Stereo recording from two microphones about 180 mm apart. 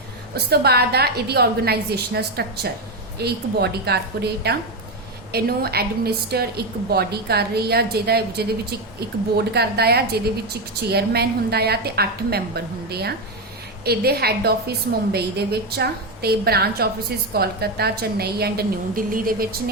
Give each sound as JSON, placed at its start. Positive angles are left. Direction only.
{"t": 0.3, "sound": "speech", "side_deg": -60}